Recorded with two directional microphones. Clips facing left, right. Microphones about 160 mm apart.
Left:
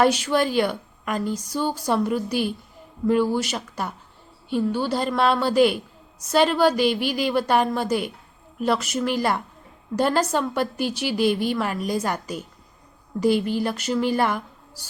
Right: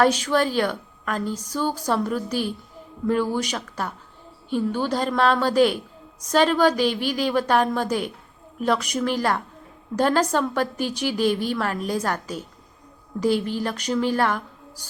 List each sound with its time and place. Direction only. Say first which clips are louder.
0.0 s speech: even; 10° left (ahead or behind)